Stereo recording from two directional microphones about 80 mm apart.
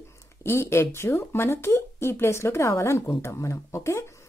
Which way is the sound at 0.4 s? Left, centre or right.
Left.